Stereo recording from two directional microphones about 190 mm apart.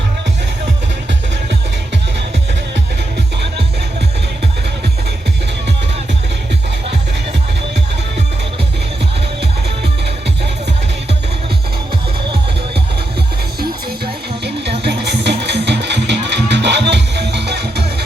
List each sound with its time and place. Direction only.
13.6 s music: 60° right (ahead or behind)